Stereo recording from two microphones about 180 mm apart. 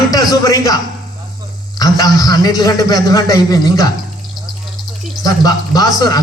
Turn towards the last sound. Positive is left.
turn(degrees=20)  # may be behind; listen again after turning